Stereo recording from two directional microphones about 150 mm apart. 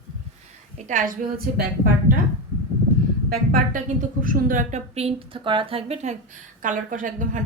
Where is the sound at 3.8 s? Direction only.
60° right (ahead or behind).